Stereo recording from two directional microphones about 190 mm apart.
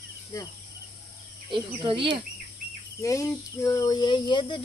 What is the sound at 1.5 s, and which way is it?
Speech, 25° right (ahead or behind).